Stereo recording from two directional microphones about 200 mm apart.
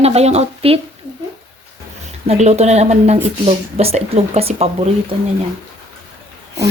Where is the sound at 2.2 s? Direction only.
30° right (ahead or behind).